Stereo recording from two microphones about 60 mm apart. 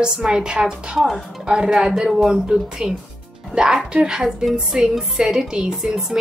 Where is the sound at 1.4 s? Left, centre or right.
Centre.